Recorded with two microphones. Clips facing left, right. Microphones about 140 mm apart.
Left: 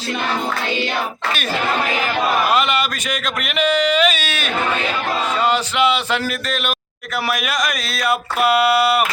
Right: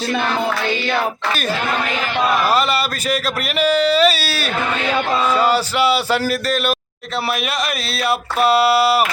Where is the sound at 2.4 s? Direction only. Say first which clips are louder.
Right 1 dB; 35° right (ahead or behind).